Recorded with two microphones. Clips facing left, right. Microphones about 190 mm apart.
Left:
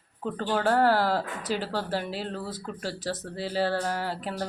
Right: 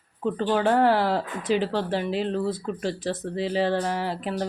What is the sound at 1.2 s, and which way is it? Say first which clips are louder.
Speech: right 6 dB; 5° left (ahead or behind).